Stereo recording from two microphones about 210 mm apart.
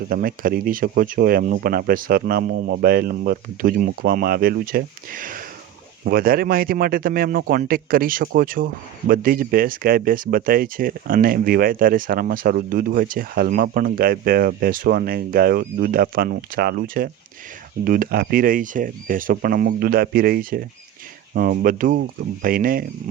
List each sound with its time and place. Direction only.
0.1 s speech: 45° right (ahead or behind)